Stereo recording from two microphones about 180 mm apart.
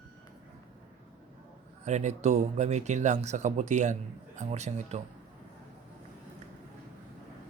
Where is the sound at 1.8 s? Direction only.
40° right (ahead or behind).